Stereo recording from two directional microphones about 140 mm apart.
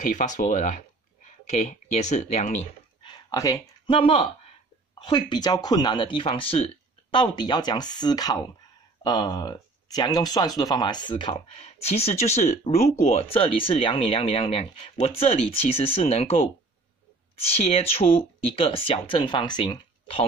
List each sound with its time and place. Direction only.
0.0 s speech: 65° left (ahead or behind)
3.0 s a sound: 35° left (ahead or behind)
3.3 s speech: 20° left (ahead or behind)
3.8 s speech: 40° left (ahead or behind)
17.5 s speech: 45° left (ahead or behind)